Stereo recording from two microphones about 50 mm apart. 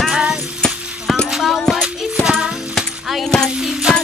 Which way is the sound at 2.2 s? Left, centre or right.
Centre.